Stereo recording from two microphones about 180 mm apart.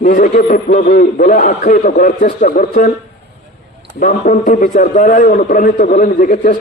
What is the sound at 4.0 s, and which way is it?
A man's voice, 50° left (ahead or behind).